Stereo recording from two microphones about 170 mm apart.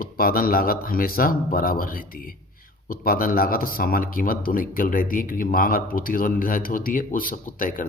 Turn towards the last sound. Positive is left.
turn(degrees=55)  # may be behind; listen again after turning